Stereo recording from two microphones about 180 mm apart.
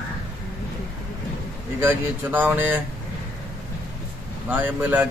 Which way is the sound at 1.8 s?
10° right (ahead or behind).